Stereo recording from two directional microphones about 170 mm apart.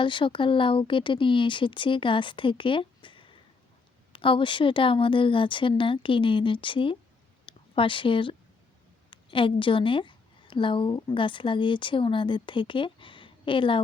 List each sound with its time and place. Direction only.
0.0 s a woman's voice: 30° left (ahead or behind)